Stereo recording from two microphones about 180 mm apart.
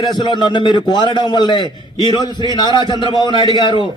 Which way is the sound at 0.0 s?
25° left (ahead or behind).